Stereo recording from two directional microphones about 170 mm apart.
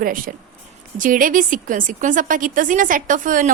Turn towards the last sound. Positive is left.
turn(degrees=-50)  # may be behind; listen again after turning